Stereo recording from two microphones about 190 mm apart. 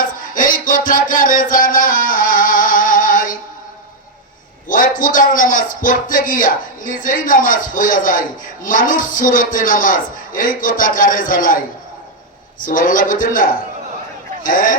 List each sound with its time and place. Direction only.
0.3 s music: 45° left (ahead or behind)
4.7 s speech: 45° left (ahead or behind)